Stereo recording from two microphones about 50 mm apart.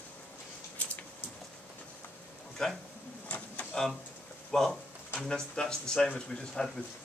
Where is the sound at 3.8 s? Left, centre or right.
Centre.